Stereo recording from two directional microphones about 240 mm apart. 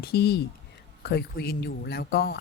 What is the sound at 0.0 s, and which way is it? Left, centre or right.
Speech, left.